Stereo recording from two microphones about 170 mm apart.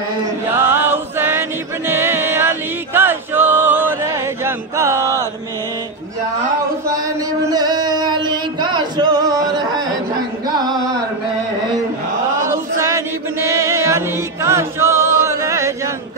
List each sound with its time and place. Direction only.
0.6 s choir: 15° right (ahead or behind)
7.5 s singing: 25° right (ahead or behind)
12.4 s chant: 15° right (ahead or behind)